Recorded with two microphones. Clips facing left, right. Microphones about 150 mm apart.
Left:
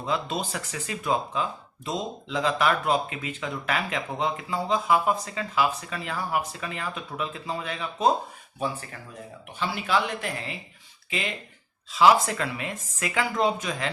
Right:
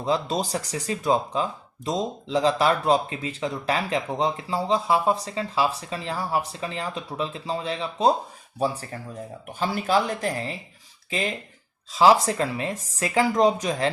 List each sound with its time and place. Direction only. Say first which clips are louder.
0.0 s speech: right 4 dB; 35° right (ahead or behind)